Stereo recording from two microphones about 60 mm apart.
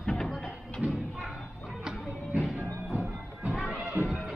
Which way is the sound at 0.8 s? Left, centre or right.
Right.